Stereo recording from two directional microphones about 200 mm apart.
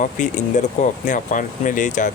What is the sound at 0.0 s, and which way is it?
Speech, 40° left (ahead or behind).